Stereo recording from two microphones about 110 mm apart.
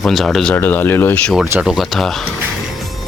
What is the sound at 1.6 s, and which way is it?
Speech, centre (ahead or behind).